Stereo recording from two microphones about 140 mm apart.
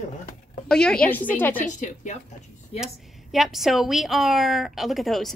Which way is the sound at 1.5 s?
65° left (ahead or behind).